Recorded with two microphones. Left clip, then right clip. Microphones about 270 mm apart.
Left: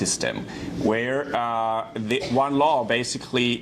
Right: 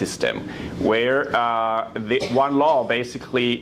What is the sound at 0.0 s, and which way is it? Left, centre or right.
Speech, left.